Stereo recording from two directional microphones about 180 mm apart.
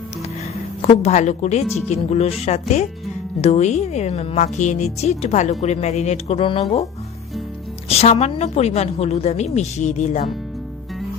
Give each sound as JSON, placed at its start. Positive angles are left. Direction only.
{"t": 0.8, "sound": "a woman's voice", "side_deg": 35}
{"t": 7.9, "sound": "a woman's voice", "side_deg": 35}